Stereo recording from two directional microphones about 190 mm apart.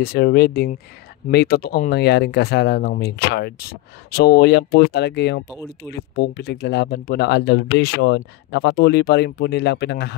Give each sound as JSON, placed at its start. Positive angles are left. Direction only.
{"t": 0.0, "sound": "speech", "side_deg": 55}